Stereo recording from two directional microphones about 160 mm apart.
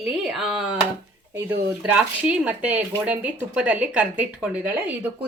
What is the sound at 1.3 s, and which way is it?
Speech, 15° right (ahead or behind).